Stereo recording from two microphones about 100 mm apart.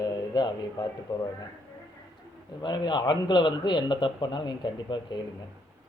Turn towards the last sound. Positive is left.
turn(degrees=50)  # may be behind; listen again after turning